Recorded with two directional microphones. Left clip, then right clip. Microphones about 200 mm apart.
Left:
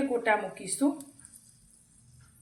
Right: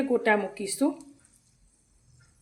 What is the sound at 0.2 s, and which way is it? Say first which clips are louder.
Speech: right 3 dB; 50° right (ahead or behind).